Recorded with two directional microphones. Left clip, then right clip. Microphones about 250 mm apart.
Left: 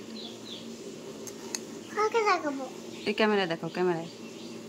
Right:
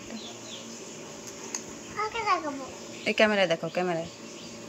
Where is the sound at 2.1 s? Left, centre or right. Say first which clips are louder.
Left 1 dB; left.